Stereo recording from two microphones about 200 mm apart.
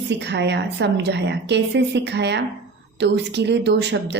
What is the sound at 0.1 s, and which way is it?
Speech, 60° right (ahead or behind).